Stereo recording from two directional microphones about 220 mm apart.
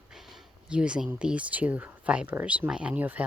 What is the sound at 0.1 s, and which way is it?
Speech, centre (ahead or behind).